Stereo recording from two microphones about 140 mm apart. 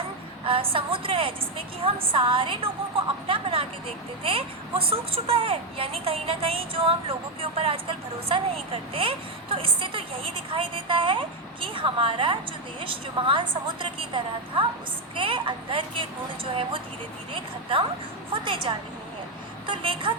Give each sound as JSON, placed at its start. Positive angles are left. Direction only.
{"t": 0.4, "sound": "a woman's voice", "side_deg": -40}